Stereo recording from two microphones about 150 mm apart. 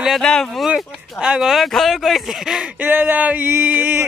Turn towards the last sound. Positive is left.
turn(degrees=-15)  # may be behind; listen again after turning